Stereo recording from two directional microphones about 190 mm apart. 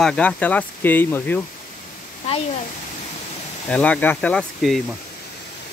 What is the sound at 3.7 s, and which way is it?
Speech, 5° left (ahead or behind).